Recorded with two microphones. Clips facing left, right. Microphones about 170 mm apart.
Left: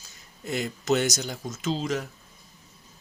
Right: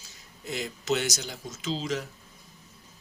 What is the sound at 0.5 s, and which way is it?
Speech, 50° left (ahead or behind).